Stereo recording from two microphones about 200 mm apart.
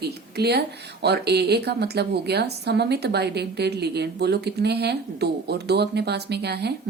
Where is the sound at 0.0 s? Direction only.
55° right (ahead or behind).